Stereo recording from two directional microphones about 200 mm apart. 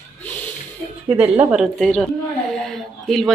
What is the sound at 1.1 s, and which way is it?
A woman's voice, 10° right (ahead or behind).